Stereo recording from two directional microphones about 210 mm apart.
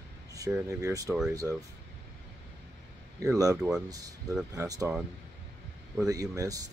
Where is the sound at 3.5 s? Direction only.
5° right (ahead or behind).